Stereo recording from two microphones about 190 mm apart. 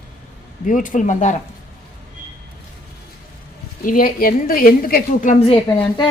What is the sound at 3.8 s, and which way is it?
A woman's voice, 45° left (ahead or behind).